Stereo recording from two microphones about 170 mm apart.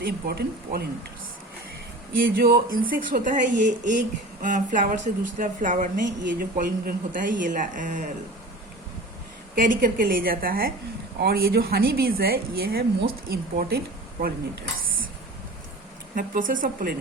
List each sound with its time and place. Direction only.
0.0 s speech: 65° right (ahead or behind)
2.1 s speech: 60° right (ahead or behind)
9.6 s speech: 55° right (ahead or behind)
16.1 s speech: 55° right (ahead or behind)